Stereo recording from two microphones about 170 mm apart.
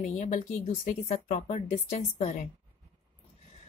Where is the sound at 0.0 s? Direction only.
45° left (ahead or behind).